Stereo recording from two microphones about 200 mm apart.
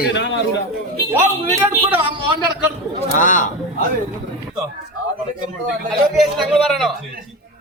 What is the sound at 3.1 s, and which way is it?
Speech, 40° left (ahead or behind).